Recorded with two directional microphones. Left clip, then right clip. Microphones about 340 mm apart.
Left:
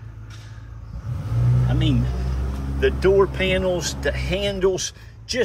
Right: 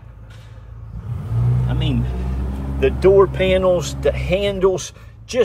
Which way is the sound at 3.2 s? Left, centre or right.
Centre.